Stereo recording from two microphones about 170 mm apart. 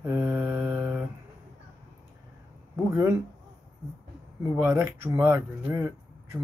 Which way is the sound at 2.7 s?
15° right (ahead or behind).